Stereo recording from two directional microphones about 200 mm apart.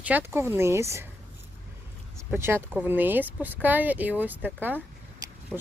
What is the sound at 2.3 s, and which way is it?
Speech, 10° right (ahead or behind).